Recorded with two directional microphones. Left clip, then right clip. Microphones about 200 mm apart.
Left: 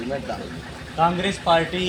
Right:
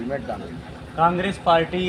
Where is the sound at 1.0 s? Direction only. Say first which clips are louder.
Right 1 dB; centre (ahead or behind).